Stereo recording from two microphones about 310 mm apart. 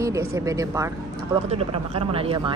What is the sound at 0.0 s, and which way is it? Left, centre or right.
A woman's voice, centre.